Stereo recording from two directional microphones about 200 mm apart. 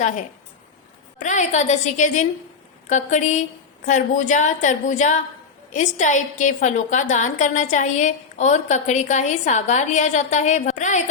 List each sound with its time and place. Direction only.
1.2 s a woman's voice: 35° left (ahead or behind)